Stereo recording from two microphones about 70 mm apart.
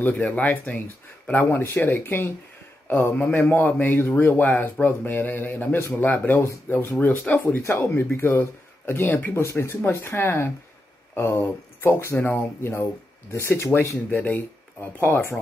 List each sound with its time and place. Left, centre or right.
0.0 s a man's voice: left
1.5 s a man's voice: left
9.3 s speech: left
14.2 s speech: left